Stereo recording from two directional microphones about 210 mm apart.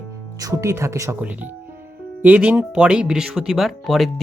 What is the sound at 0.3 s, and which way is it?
Speech, 15° right (ahead or behind).